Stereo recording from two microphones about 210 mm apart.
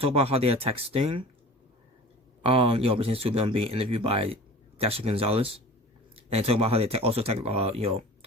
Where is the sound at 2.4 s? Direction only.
25° right (ahead or behind).